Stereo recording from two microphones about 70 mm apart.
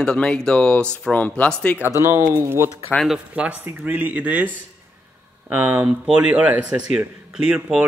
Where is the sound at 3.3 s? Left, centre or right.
Centre.